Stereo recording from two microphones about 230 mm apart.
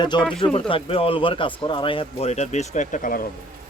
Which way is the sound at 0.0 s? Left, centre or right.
Centre.